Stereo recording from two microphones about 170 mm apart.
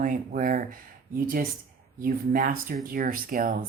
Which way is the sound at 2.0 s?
55° right (ahead or behind).